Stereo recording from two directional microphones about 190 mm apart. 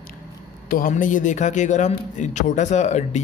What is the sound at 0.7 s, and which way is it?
A man's voice, 50° left (ahead or behind).